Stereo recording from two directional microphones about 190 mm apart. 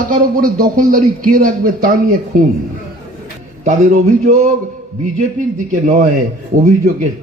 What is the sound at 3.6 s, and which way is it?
Speech, 40° right (ahead or behind).